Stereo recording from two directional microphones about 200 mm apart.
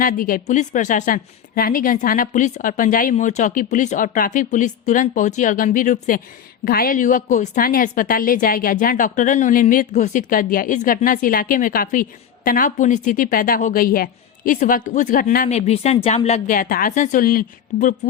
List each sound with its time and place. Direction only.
0.0 s a woman's voice: 45° left (ahead or behind)
15.4 s a woman's voice: 30° left (ahead or behind)